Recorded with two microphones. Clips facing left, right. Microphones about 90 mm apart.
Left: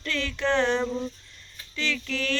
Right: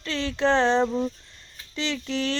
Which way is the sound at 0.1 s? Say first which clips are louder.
Right 3 dB; 30° right (ahead or behind).